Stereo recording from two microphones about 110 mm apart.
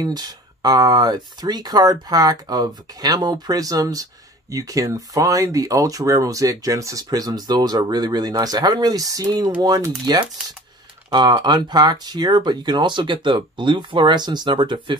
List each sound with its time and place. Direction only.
0.0 s speech: 40° right (ahead or behind)